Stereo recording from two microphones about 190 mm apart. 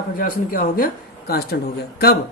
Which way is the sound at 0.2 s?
50° left (ahead or behind).